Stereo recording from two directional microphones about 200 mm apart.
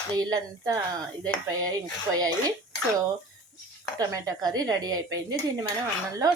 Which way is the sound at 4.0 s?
15° right (ahead or behind).